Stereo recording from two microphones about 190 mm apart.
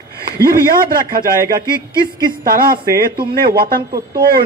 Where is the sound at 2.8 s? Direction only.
15° right (ahead or behind).